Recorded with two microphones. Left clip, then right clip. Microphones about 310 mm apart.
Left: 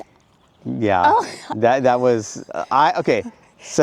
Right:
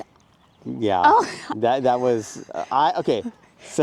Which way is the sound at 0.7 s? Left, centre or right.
Left.